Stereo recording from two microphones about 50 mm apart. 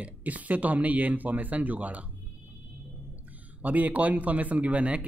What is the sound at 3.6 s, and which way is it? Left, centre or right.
Speech, right.